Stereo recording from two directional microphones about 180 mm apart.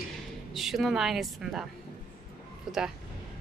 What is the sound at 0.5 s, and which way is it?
Speech, centre (ahead or behind).